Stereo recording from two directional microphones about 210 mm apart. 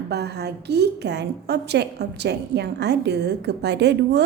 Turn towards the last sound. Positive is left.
turn(degrees=-55)  # may be behind; listen again after turning